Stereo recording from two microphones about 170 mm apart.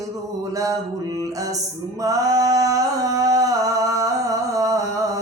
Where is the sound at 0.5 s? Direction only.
20° right (ahead or behind).